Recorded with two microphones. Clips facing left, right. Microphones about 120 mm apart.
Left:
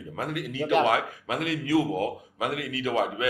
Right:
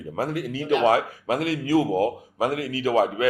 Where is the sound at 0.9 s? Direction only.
35° right (ahead or behind).